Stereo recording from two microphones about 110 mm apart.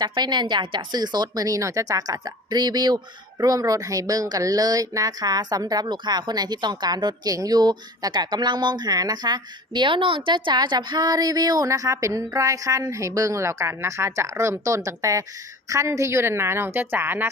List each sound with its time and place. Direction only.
0.0 s a woman's voice: 40° right (ahead or behind); by 17.2 s 20° right (ahead or behind)